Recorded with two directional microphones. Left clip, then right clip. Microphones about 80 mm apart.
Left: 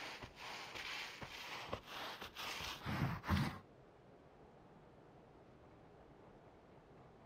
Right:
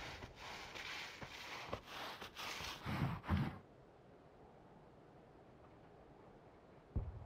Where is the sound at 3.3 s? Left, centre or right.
Left.